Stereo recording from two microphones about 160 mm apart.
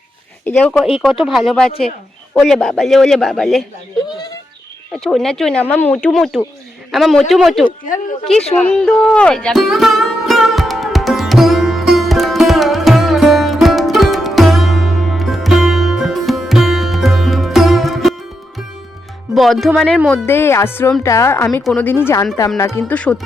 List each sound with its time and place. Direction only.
0.4 s speech: 10° left (ahead or behind)
1.2 s speech: centre (ahead or behind)
4.9 s speech: 5° left (ahead or behind)
8.7 s music: 5° left (ahead or behind)
19.3 s speech: centre (ahead or behind)
20.1 s speech: 15° left (ahead or behind)
21.6 s speech: centre (ahead or behind)
21.8 s speech: 15° left (ahead or behind)